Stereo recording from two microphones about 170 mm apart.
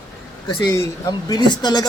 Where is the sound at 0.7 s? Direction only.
20° left (ahead or behind).